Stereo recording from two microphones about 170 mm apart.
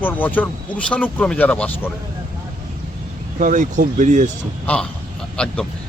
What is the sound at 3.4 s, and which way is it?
Speech, 50° right (ahead or behind).